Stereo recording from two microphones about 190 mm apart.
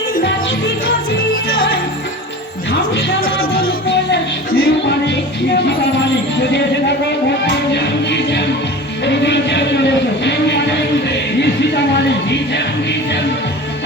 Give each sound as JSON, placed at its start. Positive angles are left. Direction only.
{"t": 3.4, "sound": "music", "side_deg": 50}
{"t": 7.4, "sound": "music", "side_deg": 65}
{"t": 9.0, "sound": "a sound", "side_deg": 65}